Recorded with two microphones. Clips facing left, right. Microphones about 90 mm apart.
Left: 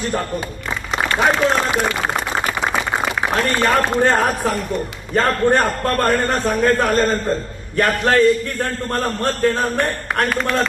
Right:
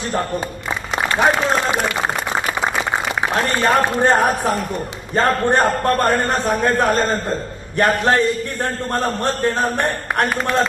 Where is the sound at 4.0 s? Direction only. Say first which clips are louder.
Right 1 dB; 20° right (ahead or behind).